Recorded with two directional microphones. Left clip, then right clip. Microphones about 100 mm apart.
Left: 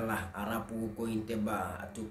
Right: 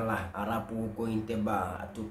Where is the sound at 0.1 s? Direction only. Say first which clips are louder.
Right 3 dB; 25° right (ahead or behind).